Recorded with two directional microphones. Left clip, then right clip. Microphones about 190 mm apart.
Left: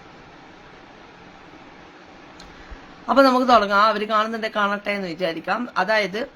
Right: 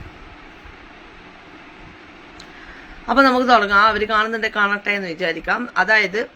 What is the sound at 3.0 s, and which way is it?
A woman's voice, 15° left (ahead or behind).